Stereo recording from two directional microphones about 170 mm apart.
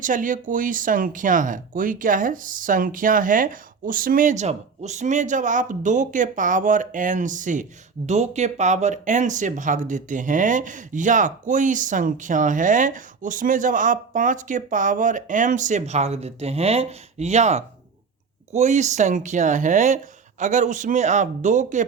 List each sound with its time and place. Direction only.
0.0 s speech: 50° right (ahead or behind)